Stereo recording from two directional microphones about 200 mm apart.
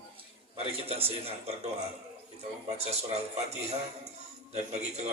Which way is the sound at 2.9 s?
30° right (ahead or behind).